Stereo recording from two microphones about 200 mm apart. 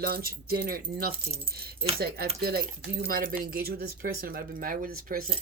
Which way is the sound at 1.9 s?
50° right (ahead or behind).